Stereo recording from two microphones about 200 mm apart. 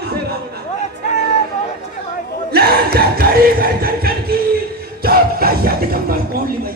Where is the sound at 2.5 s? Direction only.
50° right (ahead or behind).